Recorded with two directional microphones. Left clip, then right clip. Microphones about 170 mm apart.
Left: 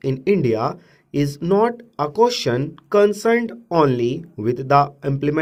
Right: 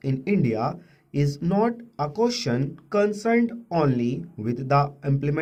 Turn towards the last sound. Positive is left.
turn(degrees=45)  # may be behind; listen again after turning